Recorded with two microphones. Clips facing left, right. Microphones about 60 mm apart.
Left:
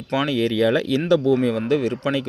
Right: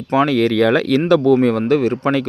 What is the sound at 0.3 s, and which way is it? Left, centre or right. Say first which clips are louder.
Speech: right 5 dB; right.